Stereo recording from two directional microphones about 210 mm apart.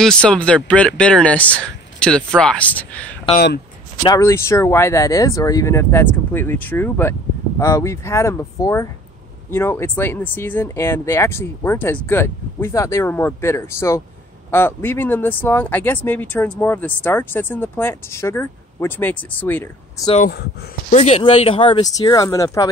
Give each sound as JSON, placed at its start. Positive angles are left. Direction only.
{"t": 0.0, "sound": "speech", "side_deg": 5}
{"t": 3.3, "sound": "speech", "side_deg": 50}
{"t": 4.0, "sound": "speech", "side_deg": 15}
{"t": 20.9, "sound": "speech", "side_deg": 30}